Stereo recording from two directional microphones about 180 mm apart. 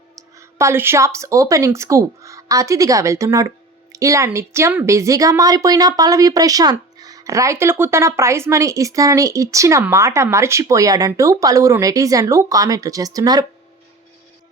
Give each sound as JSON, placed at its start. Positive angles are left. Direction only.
{"t": 0.2, "sound": "speech", "side_deg": -15}